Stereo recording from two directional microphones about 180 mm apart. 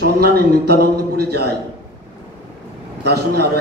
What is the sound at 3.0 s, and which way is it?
Speech, 65° right (ahead or behind).